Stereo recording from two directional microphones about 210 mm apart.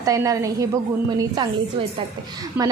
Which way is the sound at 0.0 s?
15° right (ahead or behind).